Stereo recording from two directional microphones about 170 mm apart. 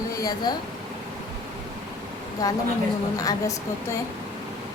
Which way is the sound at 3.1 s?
20° left (ahead or behind).